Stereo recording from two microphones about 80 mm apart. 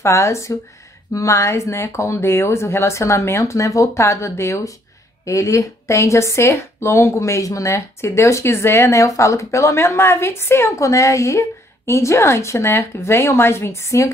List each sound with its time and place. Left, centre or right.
0.0 s speech: left